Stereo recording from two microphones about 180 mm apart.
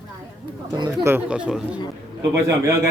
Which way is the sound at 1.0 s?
10° right (ahead or behind).